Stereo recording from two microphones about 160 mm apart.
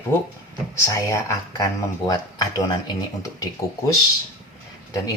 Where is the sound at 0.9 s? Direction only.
20° left (ahead or behind).